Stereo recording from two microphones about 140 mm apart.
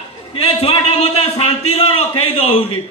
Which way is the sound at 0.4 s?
45° left (ahead or behind).